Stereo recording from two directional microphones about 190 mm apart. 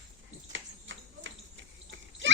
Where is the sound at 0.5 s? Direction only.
80° right.